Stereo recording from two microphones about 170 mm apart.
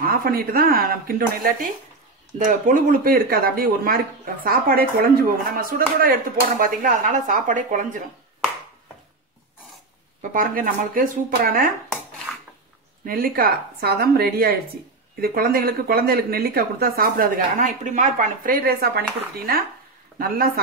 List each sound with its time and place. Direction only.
0.0 s speech: 60° right (ahead or behind)
10.3 s speech: 55° right (ahead or behind)
13.0 s speech: 60° right (ahead or behind)